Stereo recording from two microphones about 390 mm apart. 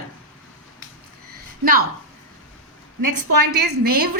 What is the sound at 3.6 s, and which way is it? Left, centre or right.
Speech, right.